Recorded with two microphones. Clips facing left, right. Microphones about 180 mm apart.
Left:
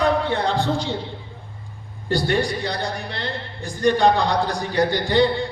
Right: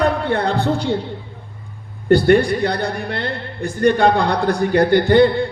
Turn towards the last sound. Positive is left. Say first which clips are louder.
# right 6 dB
turn(degrees=-55)  # may be behind; listen again after turning